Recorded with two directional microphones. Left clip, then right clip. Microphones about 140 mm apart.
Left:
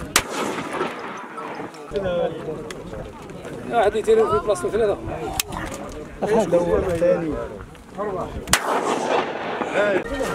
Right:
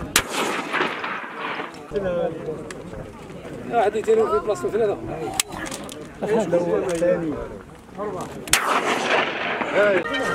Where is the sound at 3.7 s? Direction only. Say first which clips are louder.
Left 1 dB; 35° left (ahead or behind).